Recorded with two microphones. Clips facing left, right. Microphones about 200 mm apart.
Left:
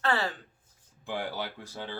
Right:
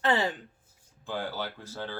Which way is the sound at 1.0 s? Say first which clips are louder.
Even; 15° left (ahead or behind).